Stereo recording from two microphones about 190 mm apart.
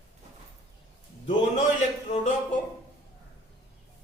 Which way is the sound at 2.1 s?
35° left (ahead or behind).